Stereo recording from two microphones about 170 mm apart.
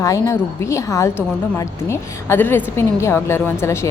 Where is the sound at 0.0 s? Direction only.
20° left (ahead or behind).